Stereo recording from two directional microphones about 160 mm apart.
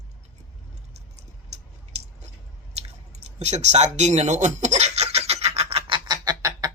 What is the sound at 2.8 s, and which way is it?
Chewing, 45° right (ahead or behind).